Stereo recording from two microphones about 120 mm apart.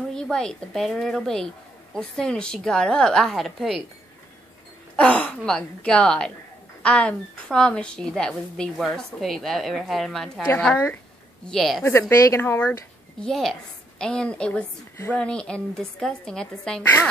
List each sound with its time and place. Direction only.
0.1 s a woman's voice: 5° left (ahead or behind)
4.9 s a woman's voice: 10° left (ahead or behind)
11.4 s a woman's voice: centre (ahead or behind)
12.3 s speech: 15° left (ahead or behind)
13.3 s a woman's voice: centre (ahead or behind)